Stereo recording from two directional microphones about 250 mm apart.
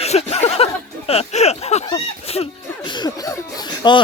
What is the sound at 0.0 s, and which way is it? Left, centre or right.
Speech, left.